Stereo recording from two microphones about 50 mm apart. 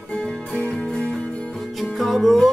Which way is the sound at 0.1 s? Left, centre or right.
Centre.